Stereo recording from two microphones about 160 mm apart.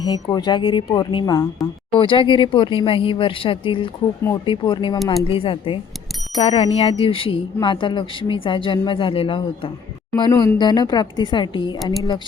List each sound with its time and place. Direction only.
0.0 s a woman's voice: 25° left (ahead or behind)